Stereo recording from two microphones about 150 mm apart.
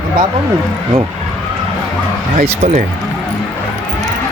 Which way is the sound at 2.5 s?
45° right (ahead or behind).